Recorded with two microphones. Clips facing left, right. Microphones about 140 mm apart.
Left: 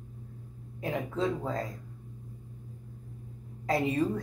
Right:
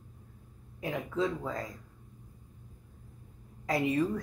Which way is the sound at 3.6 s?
30° left (ahead or behind).